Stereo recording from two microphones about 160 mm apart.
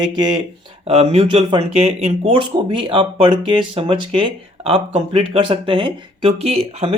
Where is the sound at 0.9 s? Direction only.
40° right (ahead or behind).